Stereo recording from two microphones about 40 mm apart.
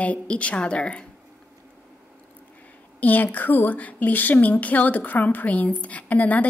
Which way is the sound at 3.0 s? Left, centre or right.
Left.